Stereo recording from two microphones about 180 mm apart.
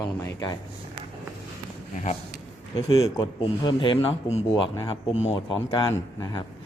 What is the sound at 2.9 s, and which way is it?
A man's voice, 20° left (ahead or behind).